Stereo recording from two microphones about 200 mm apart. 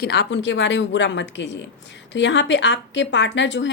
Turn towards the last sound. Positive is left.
turn(degrees=65)  # may be behind; listen again after turning